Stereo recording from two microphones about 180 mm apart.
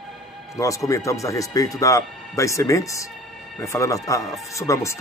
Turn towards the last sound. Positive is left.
turn(degrees=15)  # may be behind; listen again after turning